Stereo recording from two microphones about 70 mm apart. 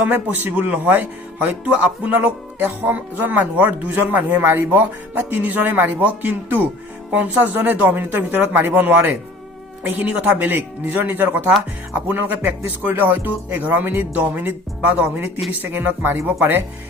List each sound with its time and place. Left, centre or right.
0.4 s speech: right